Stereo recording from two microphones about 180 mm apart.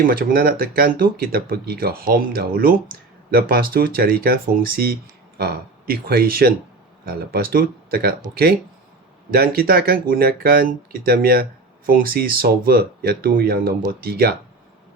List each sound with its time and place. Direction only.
0.0 s speech: 55° right (ahead or behind)